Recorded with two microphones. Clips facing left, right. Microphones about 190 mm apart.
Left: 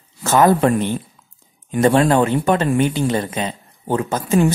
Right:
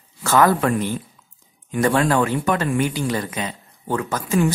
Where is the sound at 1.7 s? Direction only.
25° left (ahead or behind).